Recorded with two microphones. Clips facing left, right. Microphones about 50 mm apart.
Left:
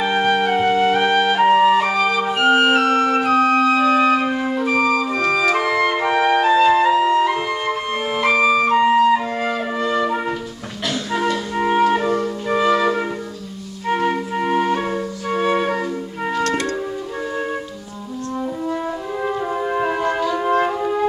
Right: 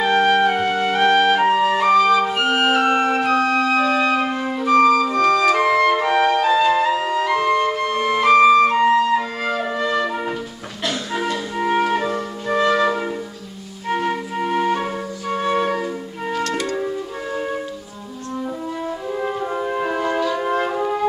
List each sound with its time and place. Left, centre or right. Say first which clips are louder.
0.0 s music: right 2 dB; centre
1.4 s flute: left 3 dB; centre
3.1 s organ: left 1 dB; centre
3.3 s organ: left 3 dB; left
3.6 s music: left 3 dB; centre
6.4 s flute: left 2 dB; centre
6.7 s flute: left 3 dB; centre
7.1 s music: left 1 dB; centre
8.4 s flute: right 2 dB; centre
9.5 s music: right 2 dB; centre
10.9 s music: left 3 dB; centre
18.7 s french horn: left 2 dB; centre
20.2 s music: left 2 dB; centre